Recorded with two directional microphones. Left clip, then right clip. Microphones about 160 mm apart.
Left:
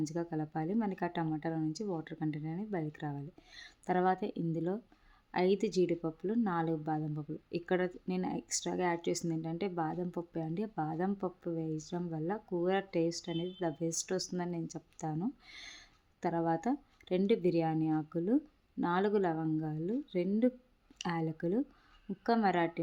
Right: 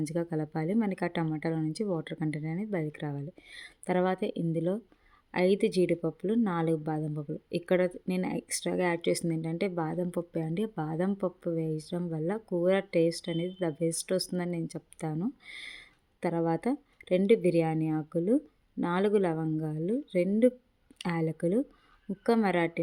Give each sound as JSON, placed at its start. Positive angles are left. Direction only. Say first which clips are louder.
{"t": 0.0, "sound": "a woman's voice", "louder": "right 4 dB", "side_deg": -30}